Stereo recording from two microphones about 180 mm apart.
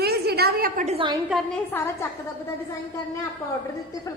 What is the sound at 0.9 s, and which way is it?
Speech, 30° right (ahead or behind).